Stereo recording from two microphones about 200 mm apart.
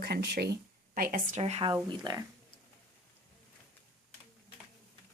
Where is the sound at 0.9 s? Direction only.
40° right (ahead or behind); by 2.0 s 25° right (ahead or behind).